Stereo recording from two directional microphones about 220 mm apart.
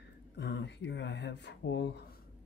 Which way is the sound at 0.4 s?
50° left (ahead or behind).